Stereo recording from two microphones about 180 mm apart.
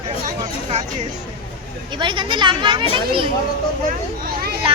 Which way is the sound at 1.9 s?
25° right (ahead or behind).